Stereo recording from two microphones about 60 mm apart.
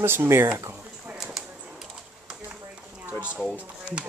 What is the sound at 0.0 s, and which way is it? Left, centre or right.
Speech, right.